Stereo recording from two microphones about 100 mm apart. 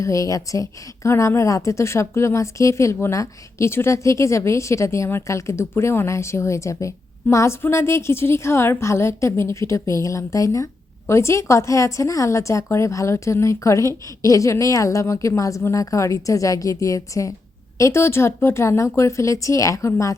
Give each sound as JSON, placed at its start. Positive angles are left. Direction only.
{"t": 0.0, "sound": "a woman's voice", "side_deg": 35}